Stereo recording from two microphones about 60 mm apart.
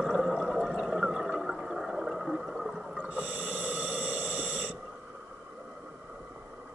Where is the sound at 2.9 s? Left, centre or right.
Right.